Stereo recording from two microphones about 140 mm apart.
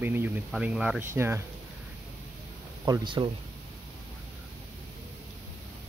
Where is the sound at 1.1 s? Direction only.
20° right (ahead or behind).